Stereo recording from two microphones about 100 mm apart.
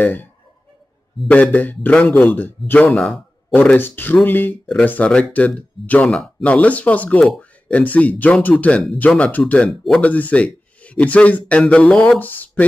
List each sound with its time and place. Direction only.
0.0 s speech: 20° left (ahead or behind)
2.9 s speech: 5° left (ahead or behind)
3.5 s speech: 20° left (ahead or behind)
10.0 s speech: 15° left (ahead or behind)